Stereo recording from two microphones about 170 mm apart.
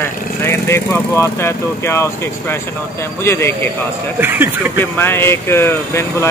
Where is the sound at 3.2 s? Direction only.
15° left (ahead or behind).